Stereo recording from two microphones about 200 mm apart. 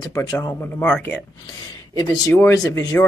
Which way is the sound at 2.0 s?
15° left (ahead or behind).